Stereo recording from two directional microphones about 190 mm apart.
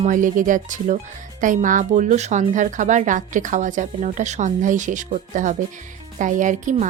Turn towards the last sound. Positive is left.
turn(degrees=-40)  # may be behind; listen again after turning